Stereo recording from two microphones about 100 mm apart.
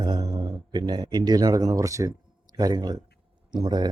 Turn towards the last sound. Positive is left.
turn(degrees=-45)  # may be behind; listen again after turning